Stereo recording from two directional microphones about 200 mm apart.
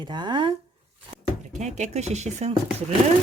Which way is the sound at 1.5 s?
35° right (ahead or behind).